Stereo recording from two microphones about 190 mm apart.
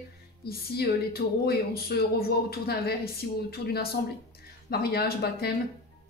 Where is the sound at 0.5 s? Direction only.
55° left (ahead or behind).